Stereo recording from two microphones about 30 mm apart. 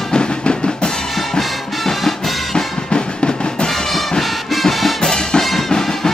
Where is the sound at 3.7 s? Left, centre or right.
Centre.